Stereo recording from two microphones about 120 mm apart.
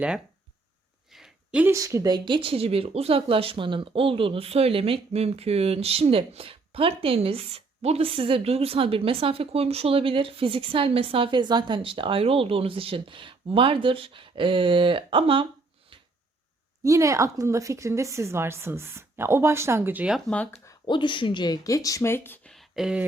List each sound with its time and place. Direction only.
1.1 s a sound: 5° right (ahead or behind)
1.7 s speech: 25° right (ahead or behind); by 15.4 s 45° right (ahead or behind)
16.8 s a woman's voice: 25° right (ahead or behind)
20.1 s speech: 5° left (ahead or behind)
20.7 s speech: 40° left (ahead or behind); by 22.4 s 20° left (ahead or behind)
22.4 s a sound: centre (ahead or behind)